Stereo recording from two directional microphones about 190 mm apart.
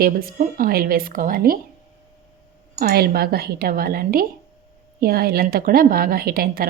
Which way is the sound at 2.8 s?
55° right (ahead or behind).